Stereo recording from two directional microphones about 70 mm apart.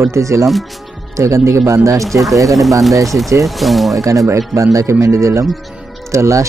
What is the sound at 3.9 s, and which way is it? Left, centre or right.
Speech, right.